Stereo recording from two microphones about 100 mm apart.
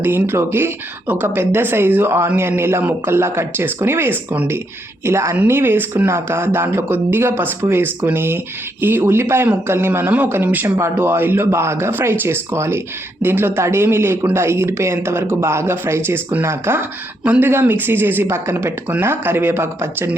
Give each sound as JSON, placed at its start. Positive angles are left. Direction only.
{"t": 0.0, "sound": "speech", "side_deg": -20}